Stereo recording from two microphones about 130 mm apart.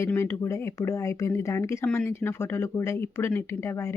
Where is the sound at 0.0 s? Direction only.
20° left (ahead or behind).